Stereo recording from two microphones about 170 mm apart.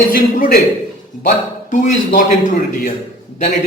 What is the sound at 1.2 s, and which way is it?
A man's voice, 50° left (ahead or behind).